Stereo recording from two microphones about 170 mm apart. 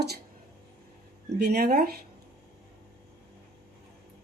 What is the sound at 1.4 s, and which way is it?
Speech, 70° right (ahead or behind).